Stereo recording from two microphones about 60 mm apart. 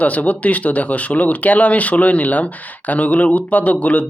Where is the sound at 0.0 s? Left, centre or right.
Left.